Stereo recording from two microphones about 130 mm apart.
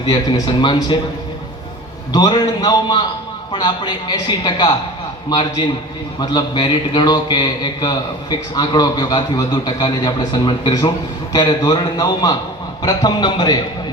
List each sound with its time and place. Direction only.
0.0 s a man's voice: 35° left (ahead or behind)
2.1 s a man's voice: 30° left (ahead or behind)